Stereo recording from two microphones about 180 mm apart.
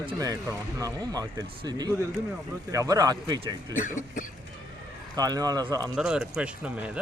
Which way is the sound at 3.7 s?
45° left (ahead or behind).